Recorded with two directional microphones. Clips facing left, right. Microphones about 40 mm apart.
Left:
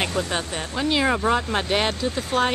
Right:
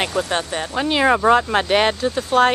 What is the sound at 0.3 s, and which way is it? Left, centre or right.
Speech, right.